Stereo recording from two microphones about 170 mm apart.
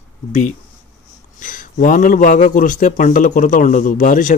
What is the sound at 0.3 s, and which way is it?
A man's voice, 45° left (ahead or behind).